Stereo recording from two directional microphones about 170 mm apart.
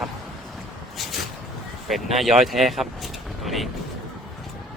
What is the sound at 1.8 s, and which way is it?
Speech, centre (ahead or behind).